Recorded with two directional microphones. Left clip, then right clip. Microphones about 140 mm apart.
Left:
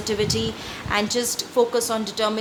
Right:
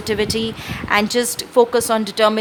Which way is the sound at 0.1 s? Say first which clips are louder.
Right 4 dB; 35° right (ahead or behind).